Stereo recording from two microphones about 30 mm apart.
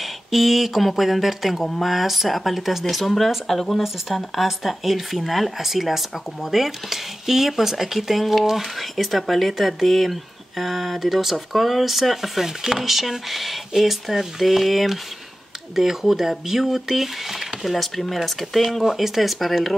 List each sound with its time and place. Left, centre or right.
0.0 s speech: centre
3.4 s speech: centre
4.1 s speech: centre
17.7 s speech: centre
18.9 s speech: centre